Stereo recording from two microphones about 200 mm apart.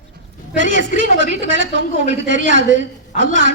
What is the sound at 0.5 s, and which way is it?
A woman's voice, 65° right (ahead or behind).